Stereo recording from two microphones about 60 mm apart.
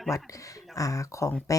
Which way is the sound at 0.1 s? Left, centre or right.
Left.